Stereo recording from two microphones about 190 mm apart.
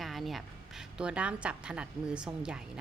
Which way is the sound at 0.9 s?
5° right (ahead or behind).